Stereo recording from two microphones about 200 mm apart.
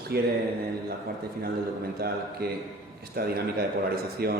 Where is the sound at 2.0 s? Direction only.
50° right (ahead or behind).